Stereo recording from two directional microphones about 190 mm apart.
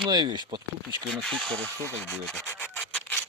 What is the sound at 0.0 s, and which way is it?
Speech, 25° right (ahead or behind).